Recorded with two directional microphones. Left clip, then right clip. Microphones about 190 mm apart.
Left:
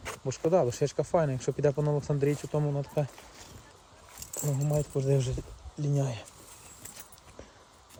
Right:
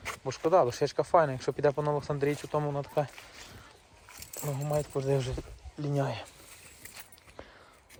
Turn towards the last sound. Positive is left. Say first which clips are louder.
# right 2 dB
turn(degrees=-5)  # may be behind; listen again after turning